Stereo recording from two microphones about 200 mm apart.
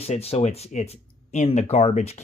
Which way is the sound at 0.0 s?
30° left (ahead or behind).